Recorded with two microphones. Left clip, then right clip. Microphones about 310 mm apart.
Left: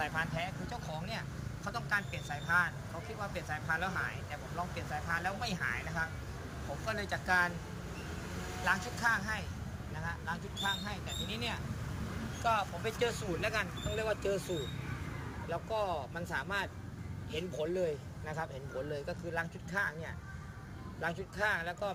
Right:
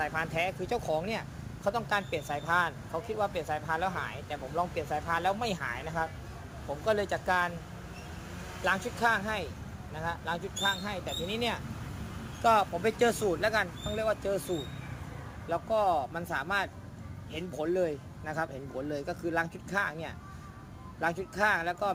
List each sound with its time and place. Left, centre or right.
0.0 s speech: centre
8.6 s speech: right